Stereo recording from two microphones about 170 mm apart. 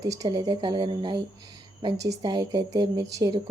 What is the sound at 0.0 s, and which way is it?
A woman's voice, 20° right (ahead or behind).